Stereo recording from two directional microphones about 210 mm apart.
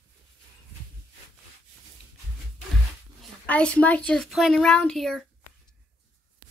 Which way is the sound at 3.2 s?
5° left (ahead or behind).